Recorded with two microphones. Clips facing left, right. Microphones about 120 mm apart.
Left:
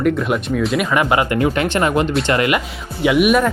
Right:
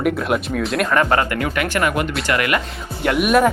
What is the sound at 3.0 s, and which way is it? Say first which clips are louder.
Speech: left 3 dB; 5° left (ahead or behind).